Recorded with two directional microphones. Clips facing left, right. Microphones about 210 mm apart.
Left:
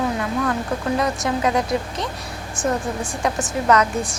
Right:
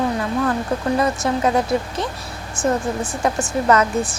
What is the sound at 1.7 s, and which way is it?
Speech, centre (ahead or behind).